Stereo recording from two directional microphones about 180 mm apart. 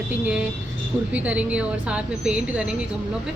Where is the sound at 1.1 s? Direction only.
5° right (ahead or behind).